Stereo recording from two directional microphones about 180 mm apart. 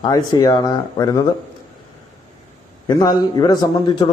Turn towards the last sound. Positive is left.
turn(degrees=25)  # may be behind; listen again after turning